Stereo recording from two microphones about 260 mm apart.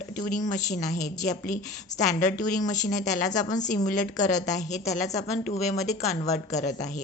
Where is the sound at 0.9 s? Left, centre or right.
Left.